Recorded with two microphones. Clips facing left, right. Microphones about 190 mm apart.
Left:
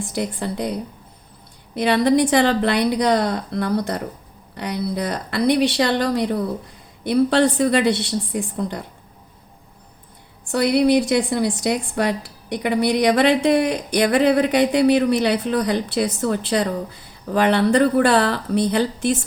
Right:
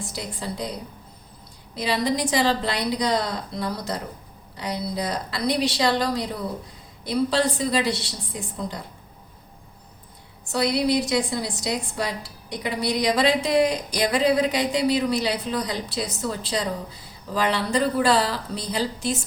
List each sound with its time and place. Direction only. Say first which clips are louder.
0.1 s a woman's voice: left 7 dB; 60° left (ahead or behind)
1.7 s a woman's voice: left 8 dB; 60° left (ahead or behind)
10.5 s a woman's voice: left 6 dB; 60° left (ahead or behind)